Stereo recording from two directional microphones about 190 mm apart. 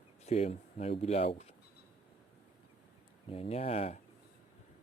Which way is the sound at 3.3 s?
30° left (ahead or behind).